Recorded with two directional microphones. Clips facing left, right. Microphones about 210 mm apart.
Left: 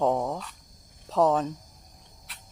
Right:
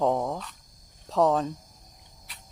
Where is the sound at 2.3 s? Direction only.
Centre (ahead or behind).